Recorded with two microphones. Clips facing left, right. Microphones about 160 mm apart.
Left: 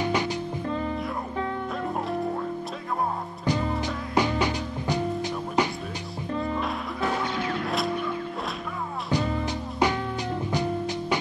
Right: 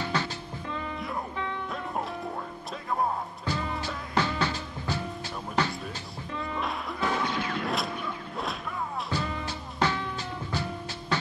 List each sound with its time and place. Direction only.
0.0 s music: 15° left (ahead or behind)
0.7 s music: 40° left (ahead or behind)
3.8 s music: 15° left (ahead or behind)
6.3 s music: 40° left (ahead or behind)
7.6 s music: centre (ahead or behind)
9.1 s music: 15° left (ahead or behind)